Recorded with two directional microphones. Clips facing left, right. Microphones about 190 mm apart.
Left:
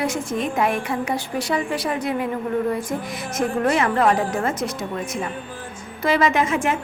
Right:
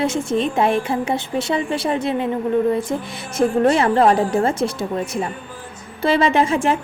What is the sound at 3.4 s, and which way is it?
A woman's voice, 30° right (ahead or behind).